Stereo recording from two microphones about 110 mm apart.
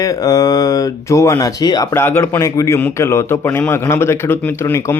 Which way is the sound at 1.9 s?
20° left (ahead or behind).